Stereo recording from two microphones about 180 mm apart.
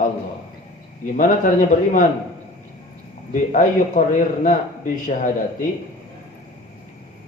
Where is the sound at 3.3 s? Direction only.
45° left (ahead or behind).